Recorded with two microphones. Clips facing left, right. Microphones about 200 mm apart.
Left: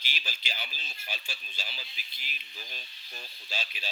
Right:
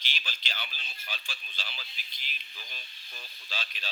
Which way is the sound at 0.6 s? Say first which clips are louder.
Left 1 dB; 40° left (ahead or behind).